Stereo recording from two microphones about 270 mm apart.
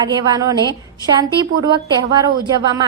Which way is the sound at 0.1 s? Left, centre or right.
Centre.